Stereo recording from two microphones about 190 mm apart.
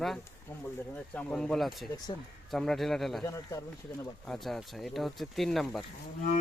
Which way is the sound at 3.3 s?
15° left (ahead or behind).